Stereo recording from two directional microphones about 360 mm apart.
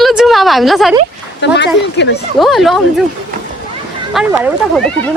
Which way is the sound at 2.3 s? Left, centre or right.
Centre.